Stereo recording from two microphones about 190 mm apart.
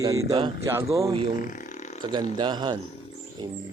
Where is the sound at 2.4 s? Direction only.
25° right (ahead or behind).